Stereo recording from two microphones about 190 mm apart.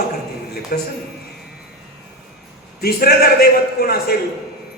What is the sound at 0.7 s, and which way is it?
Speech, 50° left (ahead or behind).